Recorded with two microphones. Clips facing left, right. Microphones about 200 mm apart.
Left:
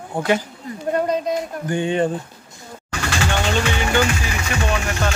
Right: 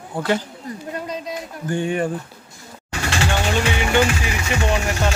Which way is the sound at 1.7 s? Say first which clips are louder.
Left 1 dB; 20° left (ahead or behind).